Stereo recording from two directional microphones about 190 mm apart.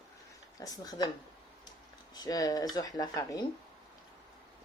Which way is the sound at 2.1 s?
20° left (ahead or behind).